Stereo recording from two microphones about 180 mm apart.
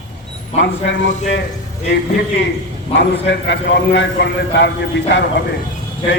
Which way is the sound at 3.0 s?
75° left (ahead or behind).